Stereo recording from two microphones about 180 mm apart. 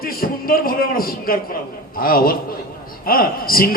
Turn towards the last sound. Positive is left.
turn(degrees=55)  # may be behind; listen again after turning